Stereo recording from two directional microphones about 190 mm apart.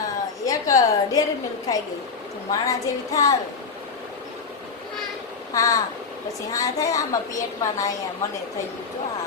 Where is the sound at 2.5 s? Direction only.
15° left (ahead or behind).